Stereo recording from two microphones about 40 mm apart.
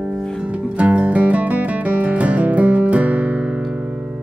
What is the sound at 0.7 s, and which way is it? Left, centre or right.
Music, right.